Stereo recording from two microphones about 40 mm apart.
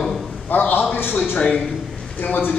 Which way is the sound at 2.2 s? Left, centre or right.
Left.